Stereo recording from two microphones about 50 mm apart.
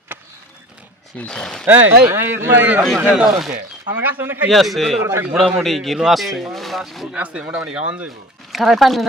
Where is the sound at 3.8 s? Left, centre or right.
Right.